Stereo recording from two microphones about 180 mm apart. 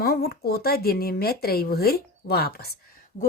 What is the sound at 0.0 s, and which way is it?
Speech, 60° left (ahead or behind).